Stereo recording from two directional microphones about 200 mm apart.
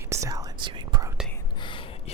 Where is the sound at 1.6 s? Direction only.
25° left (ahead or behind).